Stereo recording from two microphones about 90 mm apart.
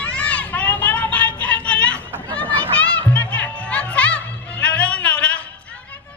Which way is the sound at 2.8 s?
20° left (ahead or behind).